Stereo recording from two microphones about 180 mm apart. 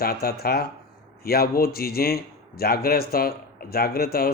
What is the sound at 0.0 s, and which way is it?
A man's voice, 55° left (ahead or behind).